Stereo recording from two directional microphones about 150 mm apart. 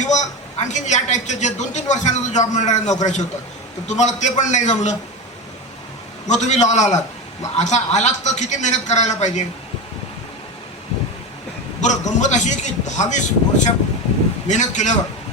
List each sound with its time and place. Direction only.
0.6 s speech: 50° left (ahead or behind)
6.2 s speech: 50° left (ahead or behind)
11.8 s speech: 55° left (ahead or behind)